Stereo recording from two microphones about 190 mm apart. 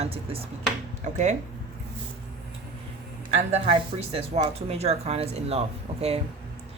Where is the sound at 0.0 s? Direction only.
30° right (ahead or behind).